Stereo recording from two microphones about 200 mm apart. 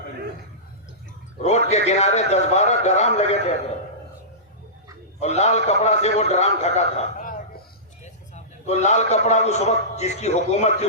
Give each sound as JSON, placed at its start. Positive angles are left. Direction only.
{"t": 1.4, "sound": "music", "side_deg": 35}
{"t": 1.9, "sound": "a man's voice", "side_deg": 35}
{"t": 5.2, "sound": "a man's voice", "side_deg": 35}